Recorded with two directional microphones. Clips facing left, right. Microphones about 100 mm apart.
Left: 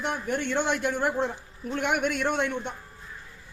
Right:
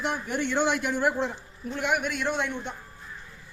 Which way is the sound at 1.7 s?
55° left (ahead or behind).